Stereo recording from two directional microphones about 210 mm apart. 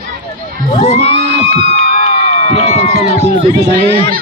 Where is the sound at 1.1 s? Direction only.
50° right (ahead or behind).